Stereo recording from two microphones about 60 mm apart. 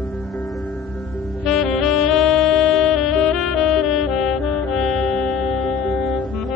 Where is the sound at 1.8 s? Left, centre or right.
Centre.